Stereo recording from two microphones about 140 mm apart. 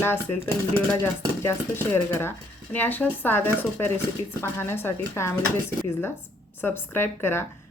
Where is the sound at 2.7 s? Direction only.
15° left (ahead or behind).